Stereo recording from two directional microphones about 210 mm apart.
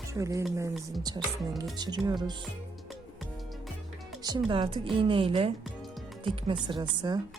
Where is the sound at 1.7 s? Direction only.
20° right (ahead or behind).